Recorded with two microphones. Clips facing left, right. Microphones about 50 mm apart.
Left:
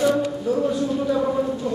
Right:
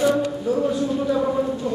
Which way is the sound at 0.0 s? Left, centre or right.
Centre.